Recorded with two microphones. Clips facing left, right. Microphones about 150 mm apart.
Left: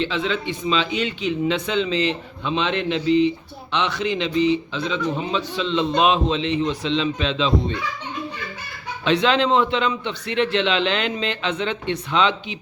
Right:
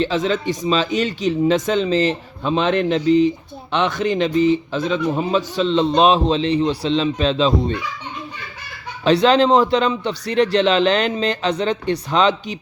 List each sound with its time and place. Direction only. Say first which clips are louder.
0.0 s speech: right 4 dB; 40° right (ahead or behind)
9.0 s speech: right 5 dB; 40° right (ahead or behind)